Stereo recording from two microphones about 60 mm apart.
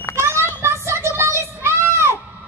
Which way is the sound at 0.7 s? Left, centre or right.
Right.